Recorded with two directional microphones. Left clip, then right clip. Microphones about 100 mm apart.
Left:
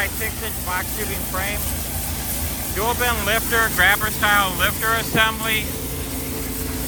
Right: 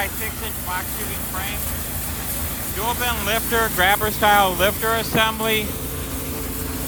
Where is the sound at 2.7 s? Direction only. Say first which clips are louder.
Left 2 dB; 40° right (ahead or behind).